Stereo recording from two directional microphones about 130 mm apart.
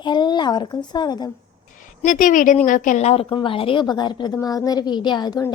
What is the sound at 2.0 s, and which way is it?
A woman's voice, 80° left.